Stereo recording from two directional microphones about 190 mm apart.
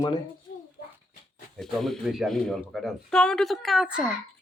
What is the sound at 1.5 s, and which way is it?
Speech, centre (ahead or behind).